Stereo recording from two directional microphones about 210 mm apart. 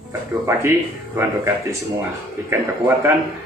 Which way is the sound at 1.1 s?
15° right (ahead or behind).